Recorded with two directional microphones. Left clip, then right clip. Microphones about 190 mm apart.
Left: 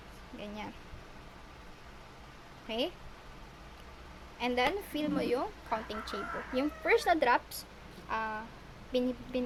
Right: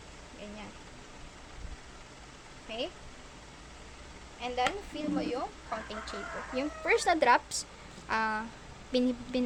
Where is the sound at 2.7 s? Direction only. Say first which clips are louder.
Left 2 dB; 30° left (ahead or behind).